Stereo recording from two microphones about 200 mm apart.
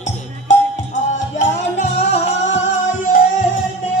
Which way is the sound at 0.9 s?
35° left (ahead or behind).